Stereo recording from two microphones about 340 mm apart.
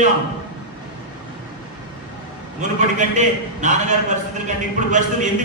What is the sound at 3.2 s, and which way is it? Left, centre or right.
Speech, right.